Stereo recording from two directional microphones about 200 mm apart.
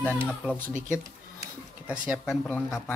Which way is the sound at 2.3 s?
10° left (ahead or behind).